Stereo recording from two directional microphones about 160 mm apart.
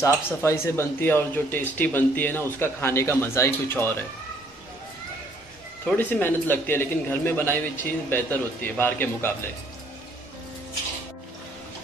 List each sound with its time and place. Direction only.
0.0 s speech: 15° left (ahead or behind)
5.9 s speech: 10° left (ahead or behind)